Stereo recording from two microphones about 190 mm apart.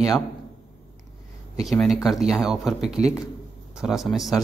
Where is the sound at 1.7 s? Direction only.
Centre (ahead or behind).